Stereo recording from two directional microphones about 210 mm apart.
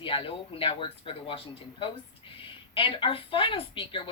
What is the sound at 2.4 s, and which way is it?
A woman's voice, 25° left (ahead or behind).